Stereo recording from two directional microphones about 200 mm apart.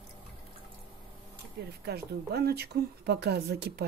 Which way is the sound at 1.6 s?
55° right (ahead or behind).